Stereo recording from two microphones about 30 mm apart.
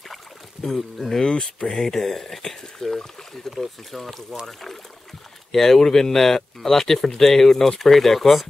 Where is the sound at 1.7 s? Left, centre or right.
Centre.